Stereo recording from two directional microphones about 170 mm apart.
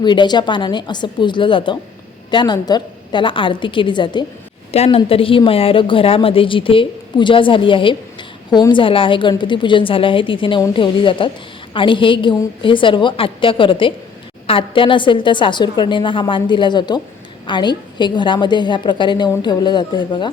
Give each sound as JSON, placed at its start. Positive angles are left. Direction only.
{"t": 0.0, "sound": "a woman's voice", "side_deg": 25}